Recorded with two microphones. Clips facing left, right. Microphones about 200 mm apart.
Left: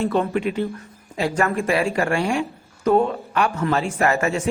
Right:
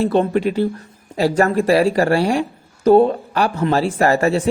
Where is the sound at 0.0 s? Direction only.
35° right (ahead or behind).